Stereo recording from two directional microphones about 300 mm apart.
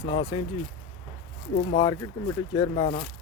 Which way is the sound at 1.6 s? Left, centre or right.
Centre.